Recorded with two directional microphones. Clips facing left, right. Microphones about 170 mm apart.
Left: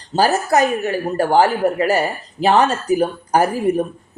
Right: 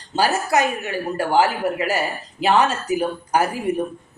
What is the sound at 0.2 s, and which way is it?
Speech, 40° left (ahead or behind).